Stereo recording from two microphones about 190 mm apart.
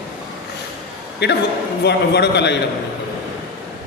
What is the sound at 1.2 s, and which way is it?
A woman's voice, 60° left (ahead or behind).